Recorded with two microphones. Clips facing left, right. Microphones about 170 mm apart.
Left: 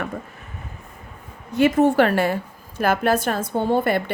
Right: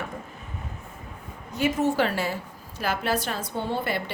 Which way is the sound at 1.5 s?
60° left (ahead or behind).